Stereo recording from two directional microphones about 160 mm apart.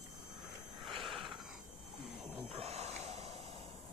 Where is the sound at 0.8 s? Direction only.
Centre (ahead or behind).